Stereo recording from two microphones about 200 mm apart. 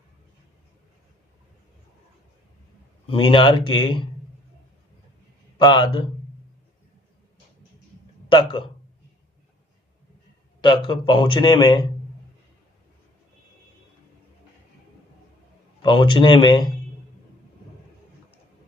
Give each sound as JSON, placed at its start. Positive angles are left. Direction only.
{"t": 3.1, "sound": "a man's voice", "side_deg": 25}
{"t": 5.5, "sound": "a man's voice", "side_deg": 20}
{"t": 8.3, "sound": "a man's voice", "side_deg": 25}
{"t": 10.6, "sound": "a man's voice", "side_deg": 25}
{"t": 15.8, "sound": "a man's voice", "side_deg": 25}